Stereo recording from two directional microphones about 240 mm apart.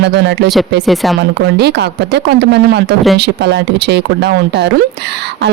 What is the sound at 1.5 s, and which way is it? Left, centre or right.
Speech, right.